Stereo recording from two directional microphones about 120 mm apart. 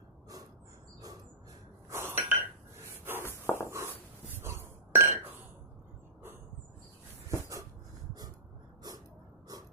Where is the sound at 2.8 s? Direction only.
20° right (ahead or behind).